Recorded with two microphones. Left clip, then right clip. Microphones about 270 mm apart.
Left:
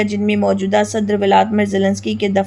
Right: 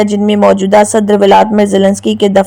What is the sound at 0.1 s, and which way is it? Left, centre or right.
Speech, right.